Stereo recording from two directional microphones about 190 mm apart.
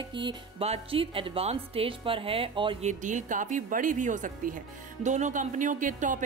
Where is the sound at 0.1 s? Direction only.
25° right (ahead or behind).